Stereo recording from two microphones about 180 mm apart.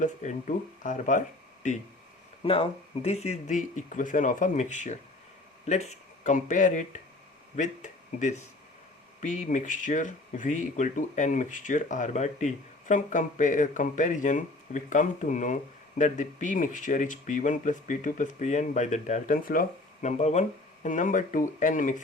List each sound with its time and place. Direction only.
0.0 s speech: 40° left (ahead or behind)
2.4 s speech: 30° left (ahead or behind)